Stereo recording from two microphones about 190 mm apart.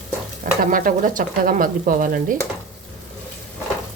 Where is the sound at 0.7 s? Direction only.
45° right (ahead or behind).